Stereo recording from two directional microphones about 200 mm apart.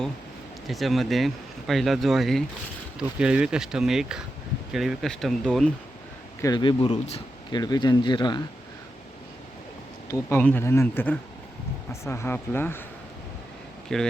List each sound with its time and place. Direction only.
0.7 s speech: centre (ahead or behind)
6.4 s speech: 20° left (ahead or behind)
10.1 s speech: 10° left (ahead or behind)
13.9 s speech: centre (ahead or behind)